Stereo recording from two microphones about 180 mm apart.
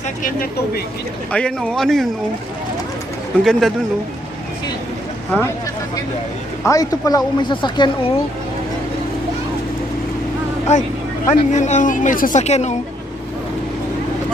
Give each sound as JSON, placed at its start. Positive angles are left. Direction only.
{"t": 0.2, "sound": "speech", "side_deg": 55}
{"t": 1.3, "sound": "a man's voice", "side_deg": 5}
{"t": 3.4, "sound": "a man's voice", "side_deg": 0}
{"t": 6.7, "sound": "speech", "side_deg": 20}
{"t": 10.7, "sound": "speech", "side_deg": 40}